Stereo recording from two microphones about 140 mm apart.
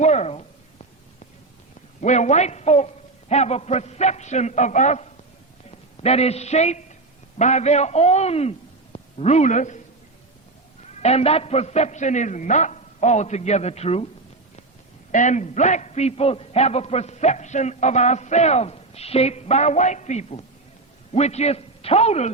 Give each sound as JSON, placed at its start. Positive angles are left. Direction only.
{"t": 0.0, "sound": "a sound", "side_deg": 55}
{"t": 2.0, "sound": "a man's voice", "side_deg": 55}
{"t": 11.0, "sound": "a man's voice", "side_deg": 50}
{"t": 15.1, "sound": "a man's voice", "side_deg": 60}